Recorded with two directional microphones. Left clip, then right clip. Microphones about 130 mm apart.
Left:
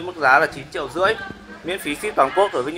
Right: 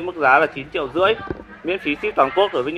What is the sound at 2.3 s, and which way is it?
Speech, 10° right (ahead or behind).